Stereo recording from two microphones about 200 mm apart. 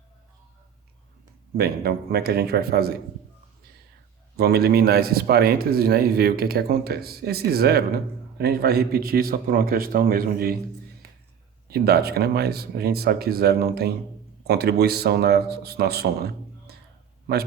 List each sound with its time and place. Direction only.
1.5 s speech: 50° right (ahead or behind)
4.4 s speech: 50° right (ahead or behind)
11.7 s speech: 50° right (ahead or behind)